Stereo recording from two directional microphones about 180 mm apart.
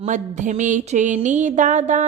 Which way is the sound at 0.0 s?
45° right (ahead or behind).